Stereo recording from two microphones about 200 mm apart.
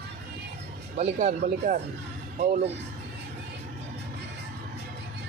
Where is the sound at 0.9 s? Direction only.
35° right (ahead or behind).